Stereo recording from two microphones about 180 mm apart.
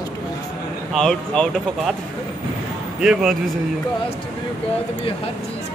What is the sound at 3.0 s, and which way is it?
Speech, 5° right (ahead or behind).